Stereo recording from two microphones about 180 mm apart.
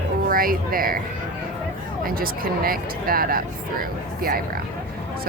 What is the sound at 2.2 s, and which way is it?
Speech, 55° right (ahead or behind).